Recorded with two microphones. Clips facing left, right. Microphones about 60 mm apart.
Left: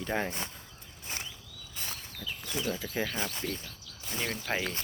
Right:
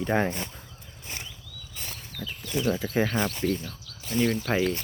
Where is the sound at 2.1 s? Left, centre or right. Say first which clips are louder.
Right 7 dB; right.